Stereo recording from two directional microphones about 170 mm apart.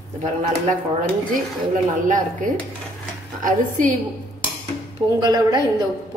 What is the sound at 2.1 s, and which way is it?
Speech, 50° right (ahead or behind).